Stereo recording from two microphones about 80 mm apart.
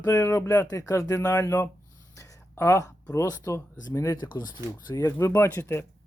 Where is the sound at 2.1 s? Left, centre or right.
Left.